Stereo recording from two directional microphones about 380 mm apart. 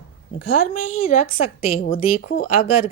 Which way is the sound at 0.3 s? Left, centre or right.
Left.